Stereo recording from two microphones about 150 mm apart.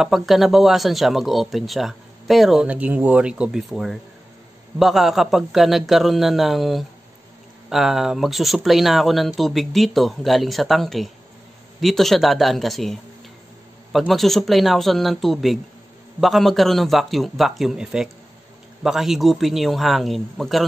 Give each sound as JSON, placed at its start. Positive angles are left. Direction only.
{"t": 0.0, "sound": "speech", "side_deg": 0}